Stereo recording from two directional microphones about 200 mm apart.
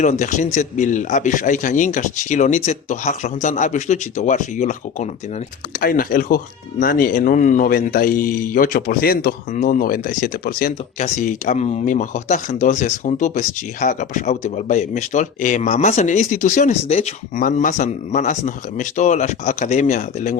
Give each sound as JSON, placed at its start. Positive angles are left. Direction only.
{"t": 0.0, "sound": "speech", "side_deg": 35}